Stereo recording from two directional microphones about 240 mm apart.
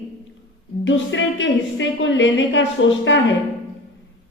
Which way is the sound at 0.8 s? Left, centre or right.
Left.